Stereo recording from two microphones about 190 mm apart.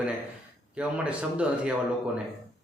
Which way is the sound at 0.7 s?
5° right (ahead or behind).